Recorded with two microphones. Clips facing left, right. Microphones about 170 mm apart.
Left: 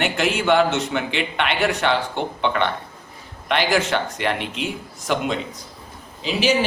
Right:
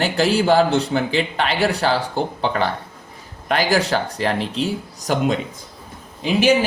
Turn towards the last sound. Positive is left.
turn(degrees=-55)  # may be behind; listen again after turning